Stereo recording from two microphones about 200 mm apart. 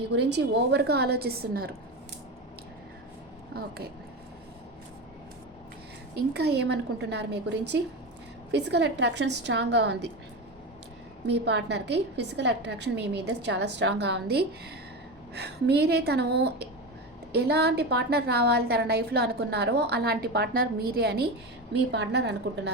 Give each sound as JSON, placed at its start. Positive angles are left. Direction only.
{"t": 0.1, "sound": "a woman's voice", "side_deg": -60}
{"t": 6.3, "sound": "a woman's voice", "side_deg": -55}
{"t": 11.3, "sound": "a woman's voice", "side_deg": -60}